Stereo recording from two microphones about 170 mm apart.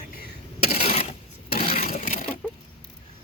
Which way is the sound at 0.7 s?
35° left (ahead or behind).